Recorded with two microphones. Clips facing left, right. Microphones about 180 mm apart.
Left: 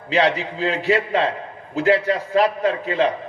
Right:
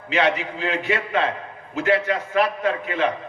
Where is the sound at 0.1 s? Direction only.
35° left (ahead or behind).